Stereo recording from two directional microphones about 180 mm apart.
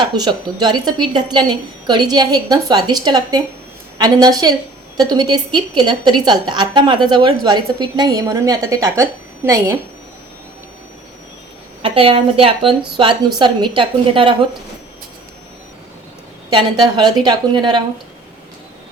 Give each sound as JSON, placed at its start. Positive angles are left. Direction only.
{"t": 0.0, "sound": "a woman's voice", "side_deg": -25}
{"t": 11.8, "sound": "a woman's voice", "side_deg": -30}
{"t": 16.5, "sound": "a woman's voice", "side_deg": -25}